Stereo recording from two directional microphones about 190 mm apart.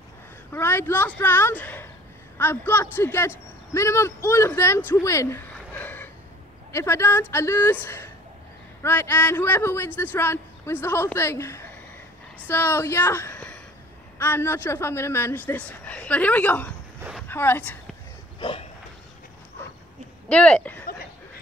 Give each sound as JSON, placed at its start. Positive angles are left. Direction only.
{"t": 0.5, "sound": "a man's voice", "side_deg": 10}
{"t": 18.4, "sound": "a sound", "side_deg": 30}
{"t": 20.2, "sound": "speech", "side_deg": 5}